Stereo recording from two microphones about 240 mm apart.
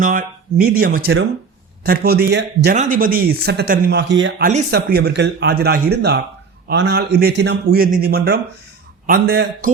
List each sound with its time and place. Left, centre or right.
0.0 s speech: right